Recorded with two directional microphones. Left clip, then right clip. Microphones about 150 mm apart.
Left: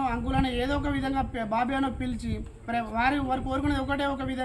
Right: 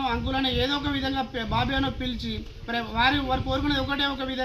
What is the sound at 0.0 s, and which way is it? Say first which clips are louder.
A man's voice: right 2 dB; 25° left (ahead or behind).